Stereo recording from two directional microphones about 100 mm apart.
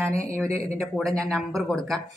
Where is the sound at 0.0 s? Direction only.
30° right (ahead or behind).